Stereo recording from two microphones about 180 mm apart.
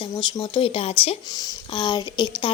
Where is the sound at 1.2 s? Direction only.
20° left (ahead or behind).